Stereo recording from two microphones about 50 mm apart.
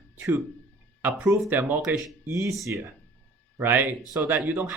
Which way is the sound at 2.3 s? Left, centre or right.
Right.